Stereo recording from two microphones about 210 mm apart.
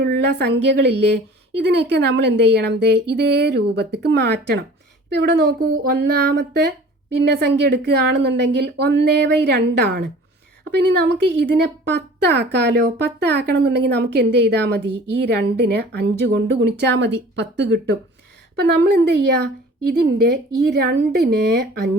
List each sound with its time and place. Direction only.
0.0 s speech: 50° right (ahead or behind)